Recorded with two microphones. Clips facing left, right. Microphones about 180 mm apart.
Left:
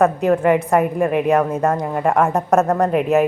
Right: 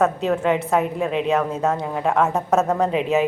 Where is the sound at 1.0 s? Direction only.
60° left (ahead or behind).